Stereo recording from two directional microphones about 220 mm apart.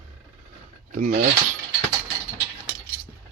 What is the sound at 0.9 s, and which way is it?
Speech, 35° right (ahead or behind).